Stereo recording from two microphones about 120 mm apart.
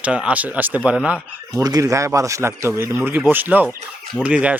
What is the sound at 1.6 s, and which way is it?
Speech, 30° right (ahead or behind).